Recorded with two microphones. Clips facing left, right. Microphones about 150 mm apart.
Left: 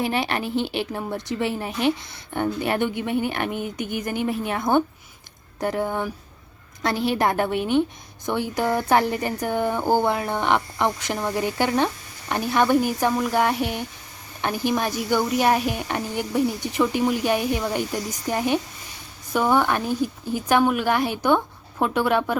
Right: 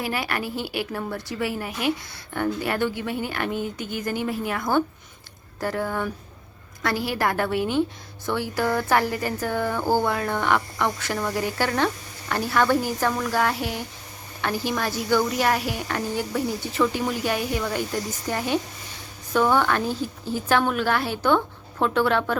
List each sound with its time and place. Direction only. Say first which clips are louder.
0.0 s a woman's voice: left 3 dB; 25° left (ahead or behind)